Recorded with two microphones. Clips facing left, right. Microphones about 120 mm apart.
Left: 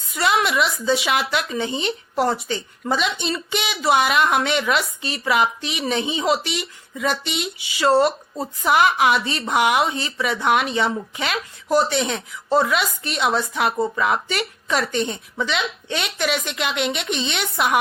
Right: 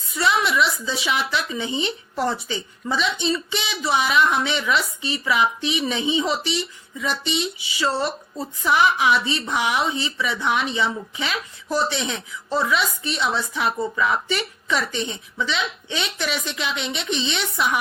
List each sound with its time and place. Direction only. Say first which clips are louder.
0.2 s a sound: left 1 dB; 60° left (ahead or behind)
0.5 s speech: left 2 dB; 50° left (ahead or behind)
6.9 s speech: left 4 dB; 60° left (ahead or behind)
7.8 s speech: left 7 dB; 50° left (ahead or behind)